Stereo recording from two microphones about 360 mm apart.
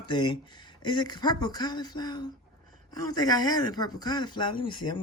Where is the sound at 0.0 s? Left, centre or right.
Centre.